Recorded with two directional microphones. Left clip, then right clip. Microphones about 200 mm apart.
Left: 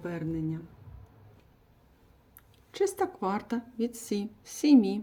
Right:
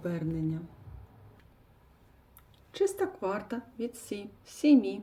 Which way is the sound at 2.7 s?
40° left (ahead or behind).